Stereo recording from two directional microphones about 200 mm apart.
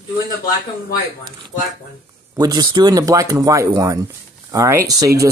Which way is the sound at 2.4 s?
20° right (ahead or behind).